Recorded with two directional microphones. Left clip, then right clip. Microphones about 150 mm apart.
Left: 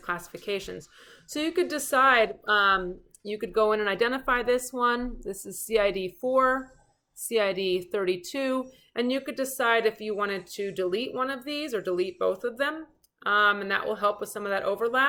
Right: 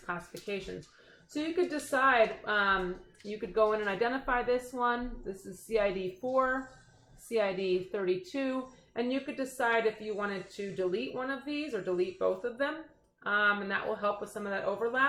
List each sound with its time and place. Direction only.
0.0 s a woman's voice: 20° left (ahead or behind)